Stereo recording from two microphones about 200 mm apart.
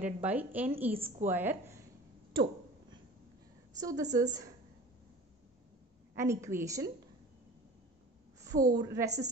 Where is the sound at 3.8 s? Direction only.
15° right (ahead or behind).